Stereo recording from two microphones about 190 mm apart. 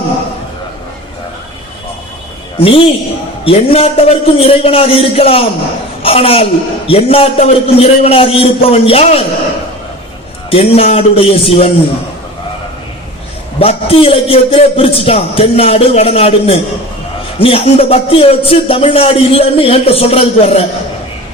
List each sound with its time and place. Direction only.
2.6 s a man's voice: 30° left (ahead or behind)
10.5 s speech: 30° left (ahead or behind)
13.6 s speech: 30° left (ahead or behind)